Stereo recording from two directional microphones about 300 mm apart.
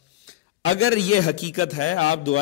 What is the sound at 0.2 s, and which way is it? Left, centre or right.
A man's voice, left.